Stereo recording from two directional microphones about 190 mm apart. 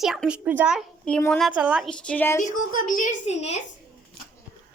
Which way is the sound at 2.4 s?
45° left (ahead or behind).